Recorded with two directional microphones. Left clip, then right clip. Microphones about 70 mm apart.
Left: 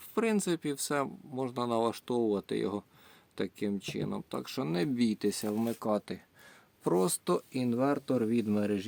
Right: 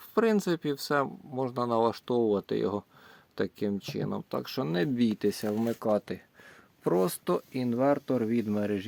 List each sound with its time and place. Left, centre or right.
0.1 s speech: right
1.3 s speech: right
6.8 s speech: right; by 8.9 s centre